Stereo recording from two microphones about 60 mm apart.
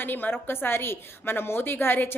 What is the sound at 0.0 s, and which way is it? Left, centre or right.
A woman's voice, left.